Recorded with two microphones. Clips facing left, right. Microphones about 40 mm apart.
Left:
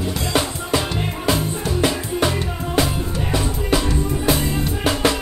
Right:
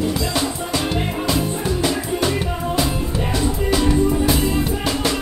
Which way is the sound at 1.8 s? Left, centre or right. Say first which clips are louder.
Left 2 dB; left.